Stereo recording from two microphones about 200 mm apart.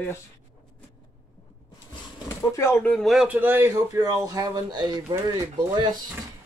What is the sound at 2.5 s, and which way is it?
A man's voice, 15° left (ahead or behind).